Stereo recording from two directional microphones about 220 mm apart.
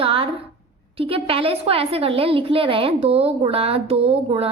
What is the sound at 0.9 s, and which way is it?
A woman's voice, 25° right (ahead or behind).